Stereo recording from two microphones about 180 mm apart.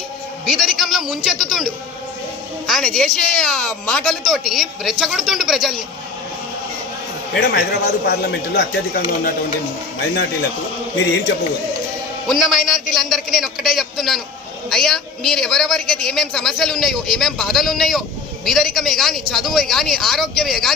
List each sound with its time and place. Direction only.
0.4 s a woman's voice: centre (ahead or behind)
7.5 s speech: 60° left (ahead or behind)
12.3 s a woman's voice: centre (ahead or behind)